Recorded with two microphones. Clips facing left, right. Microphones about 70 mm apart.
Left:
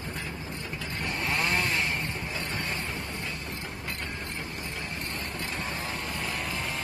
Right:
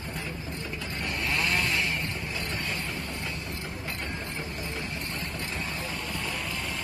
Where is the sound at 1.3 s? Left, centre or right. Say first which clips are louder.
Even; left.